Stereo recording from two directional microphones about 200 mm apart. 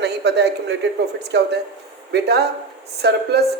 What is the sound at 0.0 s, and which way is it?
A man's voice, 55° right (ahead or behind).